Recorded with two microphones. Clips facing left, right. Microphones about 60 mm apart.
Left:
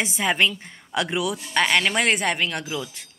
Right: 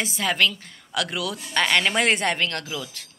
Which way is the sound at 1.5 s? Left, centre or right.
Centre.